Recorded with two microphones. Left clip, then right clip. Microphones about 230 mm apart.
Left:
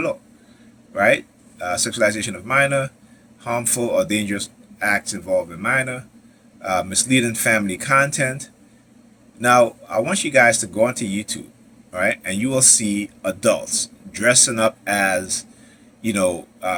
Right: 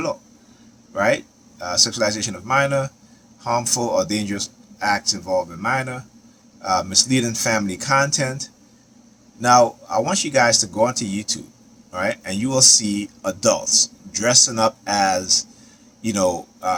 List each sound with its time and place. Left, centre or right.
0.9 s a man's voice: centre